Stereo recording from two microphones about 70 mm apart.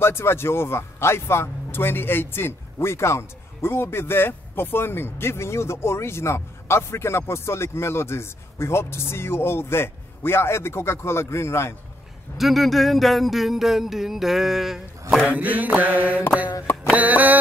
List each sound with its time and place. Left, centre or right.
0.0 s a man's voice: left
12.4 s a sound: centre
15.2 s mantra: right